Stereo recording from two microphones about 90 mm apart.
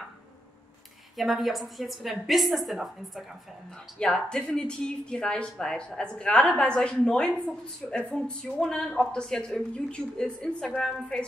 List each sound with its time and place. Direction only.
1.1 s a woman's voice: centre (ahead or behind)
4.0 s speech: 10° left (ahead or behind)